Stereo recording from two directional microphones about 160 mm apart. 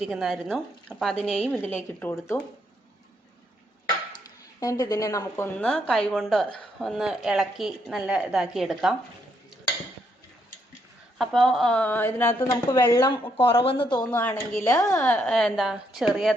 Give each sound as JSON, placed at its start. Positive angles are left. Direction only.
{"t": 0.0, "sound": "a woman's voice", "side_deg": 0}
{"t": 1.6, "sound": "a woman's voice", "side_deg": 10}
{"t": 4.6, "sound": "a woman's voice", "side_deg": 20}
{"t": 5.6, "sound": "a woman's voice", "side_deg": 5}
{"t": 11.2, "sound": "a woman's voice", "side_deg": 0}
{"t": 13.3, "sound": "speech", "side_deg": 35}
{"t": 14.0, "sound": "a woman's voice", "side_deg": 10}